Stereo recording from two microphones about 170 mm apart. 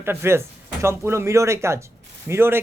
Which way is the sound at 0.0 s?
15° right (ahead or behind).